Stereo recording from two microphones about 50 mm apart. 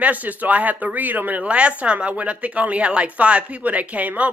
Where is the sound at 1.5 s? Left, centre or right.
Right.